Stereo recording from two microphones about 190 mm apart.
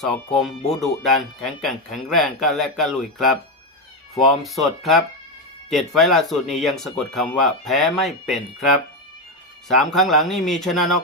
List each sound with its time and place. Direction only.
0.0 s speech: 5° left (ahead or behind)